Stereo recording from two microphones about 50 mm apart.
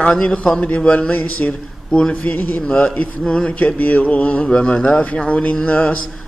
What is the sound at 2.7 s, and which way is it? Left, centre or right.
Speech, centre.